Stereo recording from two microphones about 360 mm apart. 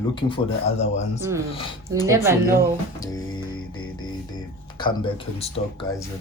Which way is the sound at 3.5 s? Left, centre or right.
Left.